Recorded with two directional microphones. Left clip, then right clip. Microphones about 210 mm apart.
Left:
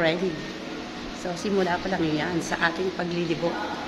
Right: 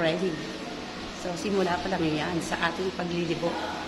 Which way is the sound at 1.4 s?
10° left (ahead or behind).